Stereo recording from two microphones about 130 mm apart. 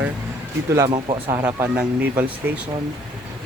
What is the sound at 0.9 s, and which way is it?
Speech, 40° right (ahead or behind).